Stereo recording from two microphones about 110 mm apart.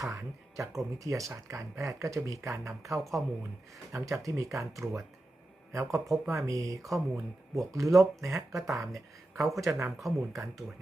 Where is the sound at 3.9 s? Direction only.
30° right (ahead or behind).